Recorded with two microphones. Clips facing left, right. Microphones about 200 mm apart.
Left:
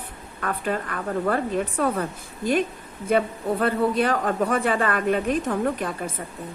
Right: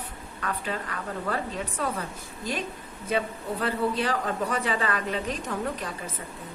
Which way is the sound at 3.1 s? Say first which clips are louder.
Left 6 dB; 55° left (ahead or behind).